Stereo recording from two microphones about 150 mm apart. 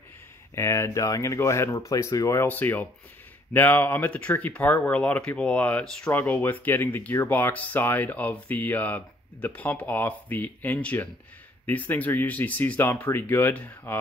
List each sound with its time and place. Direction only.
0.6 s speech: 20° left (ahead or behind)